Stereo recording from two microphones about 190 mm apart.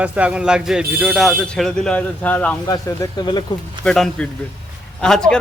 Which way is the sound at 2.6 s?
20° left (ahead or behind).